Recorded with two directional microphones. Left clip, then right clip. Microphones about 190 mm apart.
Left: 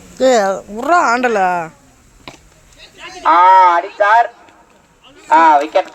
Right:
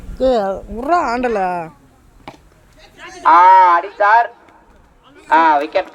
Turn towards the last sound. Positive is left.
turn(degrees=40)  # may be behind; listen again after turning